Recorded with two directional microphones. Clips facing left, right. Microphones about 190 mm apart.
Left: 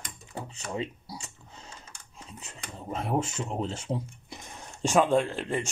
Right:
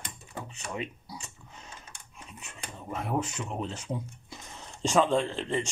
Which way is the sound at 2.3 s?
25° left (ahead or behind).